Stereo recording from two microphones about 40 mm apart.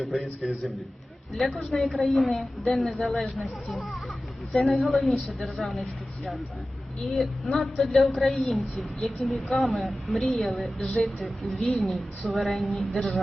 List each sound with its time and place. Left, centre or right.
0.0 s a woman's voice: centre
7.2 s a woman's voice: centre
11.5 s a woman's voice: centre